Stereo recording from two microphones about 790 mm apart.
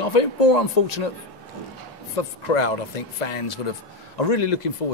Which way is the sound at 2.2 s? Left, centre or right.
Left.